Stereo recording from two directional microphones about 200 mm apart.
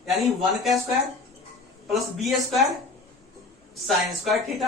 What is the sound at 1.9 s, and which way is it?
Speech, centre (ahead or behind).